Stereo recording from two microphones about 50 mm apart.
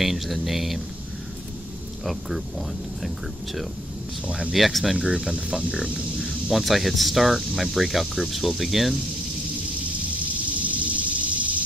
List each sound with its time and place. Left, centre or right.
0.0 s speech: centre
2.0 s speech: centre
4.3 s speech: centre
4.6 s speech: centre
4.9 s speech: centre
10.6 s a sound: right